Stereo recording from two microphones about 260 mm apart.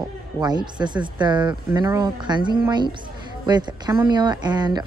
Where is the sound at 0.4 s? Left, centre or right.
Centre.